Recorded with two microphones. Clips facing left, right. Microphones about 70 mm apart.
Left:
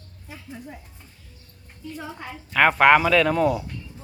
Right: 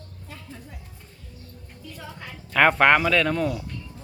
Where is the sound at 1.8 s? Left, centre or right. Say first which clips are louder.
Left 5 dB; left.